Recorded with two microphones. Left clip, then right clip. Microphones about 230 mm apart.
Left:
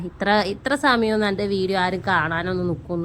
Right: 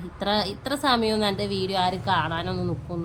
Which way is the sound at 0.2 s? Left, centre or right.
Centre.